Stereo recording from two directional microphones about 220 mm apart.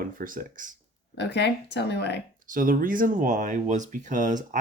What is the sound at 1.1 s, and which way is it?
Speech, 50° left (ahead or behind).